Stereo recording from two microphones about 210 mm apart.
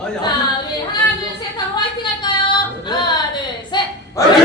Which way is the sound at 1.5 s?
20° left (ahead or behind).